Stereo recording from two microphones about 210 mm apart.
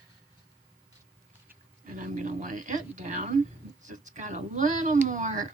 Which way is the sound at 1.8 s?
40° right (ahead or behind).